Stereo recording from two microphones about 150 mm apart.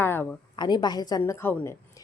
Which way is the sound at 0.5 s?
30° left (ahead or behind).